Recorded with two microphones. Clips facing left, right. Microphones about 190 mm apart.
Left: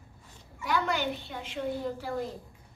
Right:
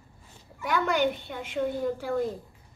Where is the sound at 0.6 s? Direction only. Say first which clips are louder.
Right 4 dB; 50° right (ahead or behind).